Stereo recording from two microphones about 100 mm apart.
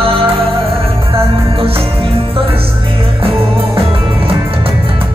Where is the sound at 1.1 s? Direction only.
70° right (ahead or behind).